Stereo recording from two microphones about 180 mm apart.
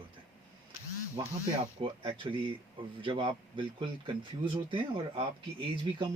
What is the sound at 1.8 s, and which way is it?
Speech, 30° right (ahead or behind).